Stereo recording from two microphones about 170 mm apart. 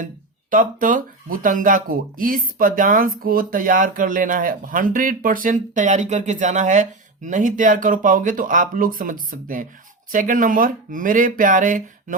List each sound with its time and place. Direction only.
0.5 s speech: 50° right (ahead or behind)